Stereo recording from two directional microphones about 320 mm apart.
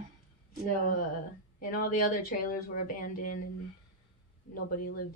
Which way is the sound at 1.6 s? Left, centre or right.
Left.